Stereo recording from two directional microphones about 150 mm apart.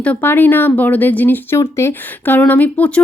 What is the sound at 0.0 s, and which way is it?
Speech, 10° left (ahead or behind).